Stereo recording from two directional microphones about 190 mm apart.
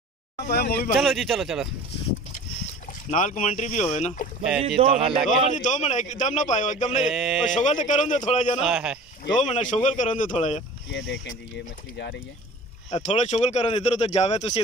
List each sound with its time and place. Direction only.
0.4 s speech: 55° left (ahead or behind)
0.9 s speech: centre (ahead or behind)
2.9 s speech: 40° left (ahead or behind)
4.6 s speech: 30° right (ahead or behind)
5.3 s speech: 40° left (ahead or behind)
7.0 s speech: centre (ahead or behind)
7.4 s speech: 40° left (ahead or behind)
8.6 s speech: 5° right (ahead or behind)
9.4 s speech: 40° left (ahead or behind)
10.9 s speech: 70° left (ahead or behind)
12.9 s speech: 35° left (ahead or behind)